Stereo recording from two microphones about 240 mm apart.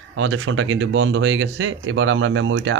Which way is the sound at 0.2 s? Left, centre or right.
Right.